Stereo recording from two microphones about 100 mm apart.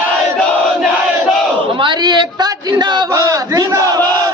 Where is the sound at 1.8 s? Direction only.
50° right (ahead or behind).